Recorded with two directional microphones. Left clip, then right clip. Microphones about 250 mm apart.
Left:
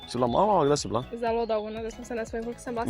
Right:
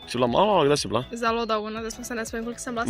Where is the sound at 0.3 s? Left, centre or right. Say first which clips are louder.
Right 2 dB; centre.